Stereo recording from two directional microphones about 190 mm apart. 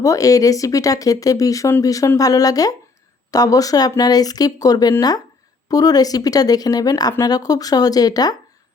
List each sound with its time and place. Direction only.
0.0 s speech: 15° left (ahead or behind)